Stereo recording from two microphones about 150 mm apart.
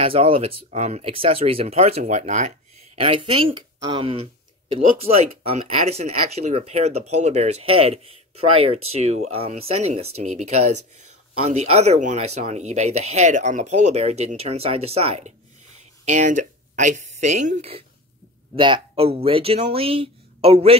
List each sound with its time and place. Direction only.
0.0 s speech: 40° right (ahead or behind)
0.7 s speech: 50° right (ahead or behind)
3.0 s speech: 35° right (ahead or behind)